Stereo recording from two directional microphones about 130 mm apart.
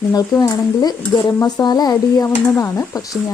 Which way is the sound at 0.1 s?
30° left (ahead or behind).